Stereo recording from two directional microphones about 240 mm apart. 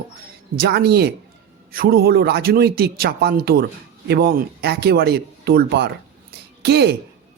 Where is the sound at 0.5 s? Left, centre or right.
Right.